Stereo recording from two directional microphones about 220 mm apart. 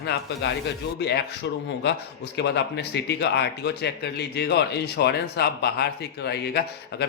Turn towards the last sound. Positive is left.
turn(degrees=50)  # may be behind; listen again after turning